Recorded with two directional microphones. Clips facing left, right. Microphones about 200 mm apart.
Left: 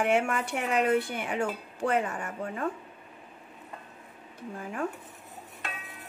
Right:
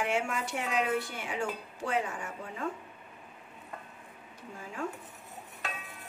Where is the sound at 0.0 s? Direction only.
60° left (ahead or behind).